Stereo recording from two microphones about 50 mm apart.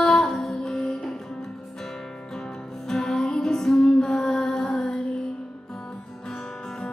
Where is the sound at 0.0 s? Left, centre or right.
Centre.